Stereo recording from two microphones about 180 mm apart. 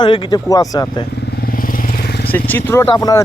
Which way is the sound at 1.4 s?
50° left (ahead or behind).